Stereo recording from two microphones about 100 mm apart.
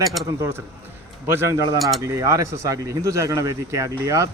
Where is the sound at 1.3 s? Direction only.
25° right (ahead or behind).